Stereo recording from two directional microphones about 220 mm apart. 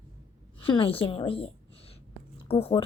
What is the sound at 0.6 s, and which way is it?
A woman's voice, 25° left (ahead or behind).